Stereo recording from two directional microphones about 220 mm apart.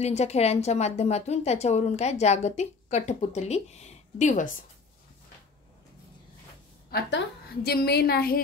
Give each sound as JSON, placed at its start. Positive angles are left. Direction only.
{"t": 0.0, "sound": "a woman's voice", "side_deg": 30}
{"t": 6.9, "sound": "a woman's voice", "side_deg": 50}